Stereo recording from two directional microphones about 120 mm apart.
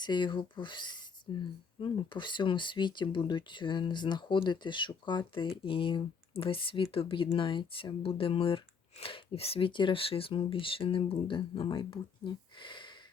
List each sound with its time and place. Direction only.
0.0 s speech: 40° left (ahead or behind)